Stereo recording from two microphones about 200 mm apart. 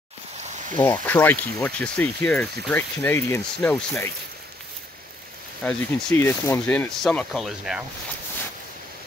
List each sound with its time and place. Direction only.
0.4 s a sound: 35° right (ahead or behind)
0.8 s speech: 10° left (ahead or behind)
5.6 s speech: 10° left (ahead or behind)